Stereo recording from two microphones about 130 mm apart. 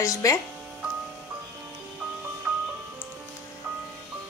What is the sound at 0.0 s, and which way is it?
Speech, 25° left (ahead or behind).